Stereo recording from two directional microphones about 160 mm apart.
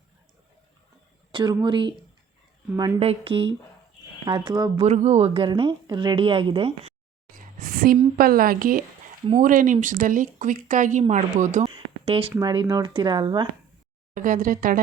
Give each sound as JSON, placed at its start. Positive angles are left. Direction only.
{"t": 1.3, "sound": "speech", "side_deg": -30}
{"t": 3.0, "sound": "a woman's voice", "side_deg": -35}
{"t": 4.3, "sound": "speech", "side_deg": -25}
{"t": 4.8, "sound": "a woman's voice", "side_deg": -45}
{"t": 7.3, "sound": "a sound", "side_deg": -60}
{"t": 8.2, "sound": "speech", "side_deg": -65}
{"t": 11.6, "sound": "a sound", "side_deg": -35}
{"t": 12.4, "sound": "speech", "side_deg": -25}
{"t": 14.2, "sound": "speech", "side_deg": -55}